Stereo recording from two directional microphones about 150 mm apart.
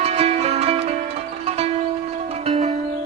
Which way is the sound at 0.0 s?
45° right (ahead or behind).